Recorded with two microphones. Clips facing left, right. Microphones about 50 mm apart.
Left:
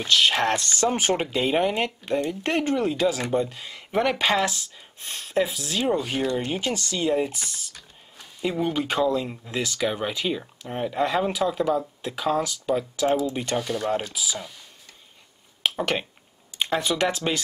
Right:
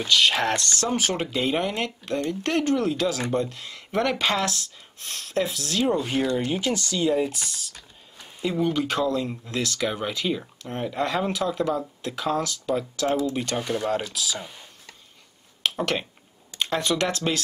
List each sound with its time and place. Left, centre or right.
0.0 s speech: centre
0.6 s speech: left
1.2 s speech: centre
13.6 s speech: centre
14.1 s speech: centre
15.7 s speech: centre